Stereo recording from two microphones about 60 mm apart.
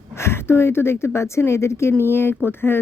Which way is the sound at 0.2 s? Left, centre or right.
Left.